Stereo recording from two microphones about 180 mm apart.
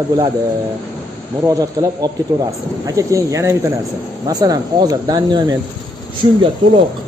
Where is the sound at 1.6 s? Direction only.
20° right (ahead or behind).